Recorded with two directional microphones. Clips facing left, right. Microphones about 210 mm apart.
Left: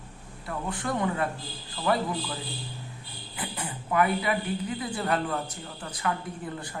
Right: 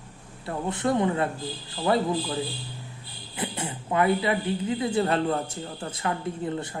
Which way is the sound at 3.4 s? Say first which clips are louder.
Right 4 dB; 25° right (ahead or behind).